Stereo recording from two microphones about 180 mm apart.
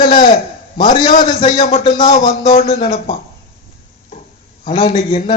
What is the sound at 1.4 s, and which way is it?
A man's voice, 35° left (ahead or behind).